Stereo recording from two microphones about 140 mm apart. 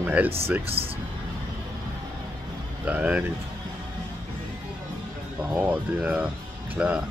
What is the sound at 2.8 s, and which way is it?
Speech, 10° right (ahead or behind).